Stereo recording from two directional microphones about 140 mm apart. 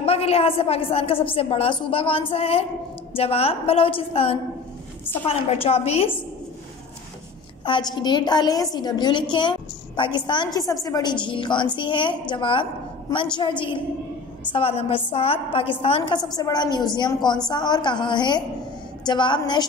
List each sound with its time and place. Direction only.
0.0 s a woman's voice: 45° left (ahead or behind)
7.6 s a woman's voice: 35° left (ahead or behind)
16.2 s a woman's voice: 30° left (ahead or behind)